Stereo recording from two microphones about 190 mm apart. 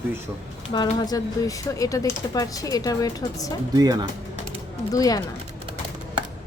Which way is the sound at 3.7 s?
20° right (ahead or behind).